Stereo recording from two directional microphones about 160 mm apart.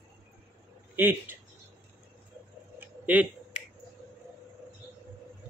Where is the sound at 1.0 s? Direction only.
10° right (ahead or behind).